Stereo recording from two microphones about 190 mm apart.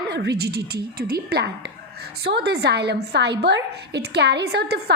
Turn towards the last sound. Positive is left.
turn(degrees=-60)  # may be behind; listen again after turning